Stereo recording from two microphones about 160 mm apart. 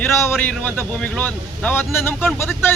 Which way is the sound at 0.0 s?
15° left (ahead or behind).